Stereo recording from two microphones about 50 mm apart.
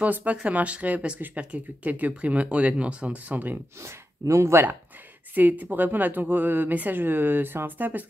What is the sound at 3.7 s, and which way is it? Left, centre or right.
Speech, right.